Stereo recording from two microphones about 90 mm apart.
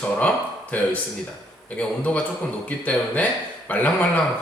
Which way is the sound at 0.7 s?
20° left (ahead or behind).